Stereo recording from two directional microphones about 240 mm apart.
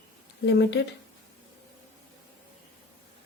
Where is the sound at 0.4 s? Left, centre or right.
Left.